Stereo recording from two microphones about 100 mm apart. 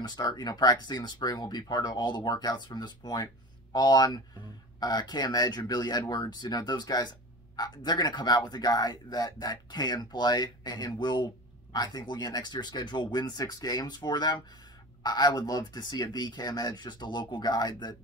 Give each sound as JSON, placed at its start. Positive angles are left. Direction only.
{"t": 0.0, "sound": "speech", "side_deg": 45}